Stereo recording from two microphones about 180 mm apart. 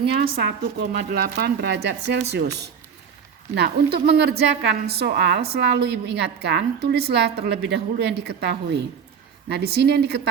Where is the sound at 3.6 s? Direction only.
65° right (ahead or behind).